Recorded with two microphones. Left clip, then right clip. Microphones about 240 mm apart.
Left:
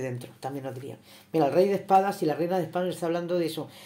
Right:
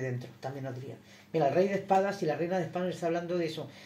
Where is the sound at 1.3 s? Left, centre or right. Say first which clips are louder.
Left 4 dB; left.